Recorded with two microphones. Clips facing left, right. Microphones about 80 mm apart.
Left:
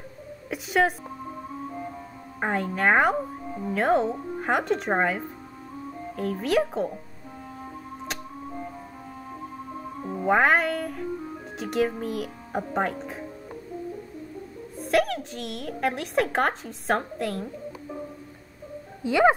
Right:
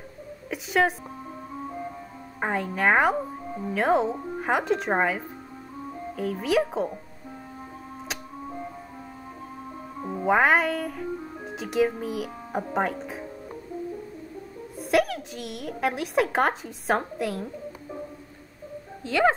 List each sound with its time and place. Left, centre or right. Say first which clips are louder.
0.5 s speech: even; centre
2.4 s speech: even; centre
10.0 s speech: even; centre
14.8 s a woman's voice: even; centre
19.0 s speech: left 3 dB; centre